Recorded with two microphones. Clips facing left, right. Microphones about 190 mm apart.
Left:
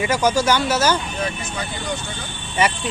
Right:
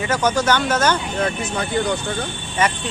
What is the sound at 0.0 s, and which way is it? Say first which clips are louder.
Speech: left 1 dB; 10° left (ahead or behind).